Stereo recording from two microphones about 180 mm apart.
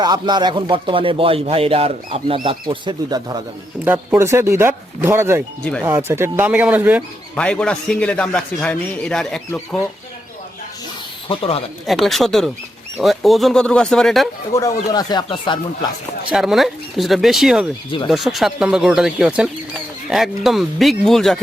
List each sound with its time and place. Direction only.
0.0 s speech: 25° right (ahead or behind)
3.8 s speech: 10° right (ahead or behind)
7.3 s a man's voice: 5° left (ahead or behind)
11.3 s speech: 30° left (ahead or behind)
11.9 s a man's voice: centre (ahead or behind)
14.5 s speech: 20° left (ahead or behind)
16.3 s a man's voice: centre (ahead or behind)